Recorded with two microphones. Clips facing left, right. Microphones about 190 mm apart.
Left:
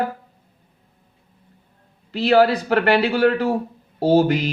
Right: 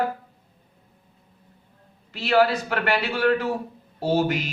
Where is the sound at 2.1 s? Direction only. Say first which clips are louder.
Left 5 dB; 35° left (ahead or behind).